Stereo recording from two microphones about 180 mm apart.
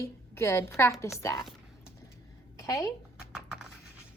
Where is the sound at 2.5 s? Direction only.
15° left (ahead or behind).